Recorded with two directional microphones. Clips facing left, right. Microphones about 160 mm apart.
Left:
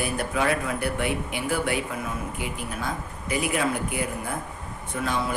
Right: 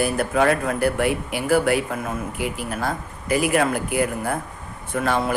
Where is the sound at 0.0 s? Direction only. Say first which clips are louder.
Right 6 dB; 55° right (ahead or behind).